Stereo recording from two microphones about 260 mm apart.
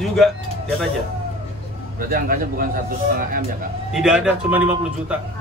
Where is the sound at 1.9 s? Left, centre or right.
Right.